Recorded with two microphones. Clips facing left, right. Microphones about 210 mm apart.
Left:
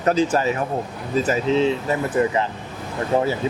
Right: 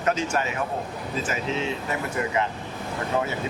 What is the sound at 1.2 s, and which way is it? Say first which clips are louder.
Speech: left 10 dB; 35° left (ahead or behind).